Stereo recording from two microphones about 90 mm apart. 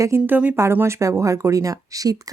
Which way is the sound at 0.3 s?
20° right (ahead or behind).